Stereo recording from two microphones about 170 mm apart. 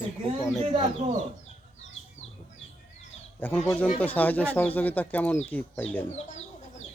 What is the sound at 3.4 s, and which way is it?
Speech, 10° left (ahead or behind).